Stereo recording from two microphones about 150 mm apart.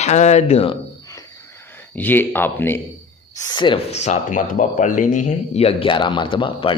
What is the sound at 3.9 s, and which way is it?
Speech, 50° left (ahead or behind).